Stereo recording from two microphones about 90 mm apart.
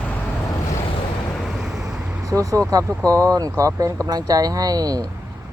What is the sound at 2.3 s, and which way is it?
Vehicle, 40° right (ahead or behind).